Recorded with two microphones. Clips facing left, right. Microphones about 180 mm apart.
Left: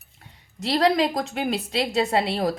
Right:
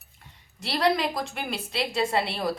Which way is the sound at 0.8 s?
40° left (ahead or behind).